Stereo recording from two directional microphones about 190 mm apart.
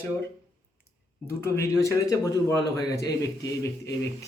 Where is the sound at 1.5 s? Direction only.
15° left (ahead or behind).